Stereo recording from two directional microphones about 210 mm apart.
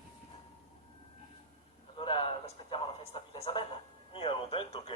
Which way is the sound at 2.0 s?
25° left (ahead or behind).